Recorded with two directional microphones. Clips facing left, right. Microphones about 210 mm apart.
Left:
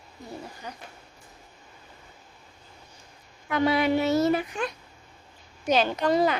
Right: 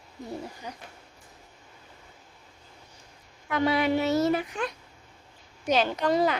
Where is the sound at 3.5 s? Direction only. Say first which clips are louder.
Left 1 dB; 20° left (ahead or behind).